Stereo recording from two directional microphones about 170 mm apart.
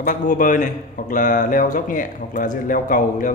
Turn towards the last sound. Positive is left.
turn(degrees=55)  # may be behind; listen again after turning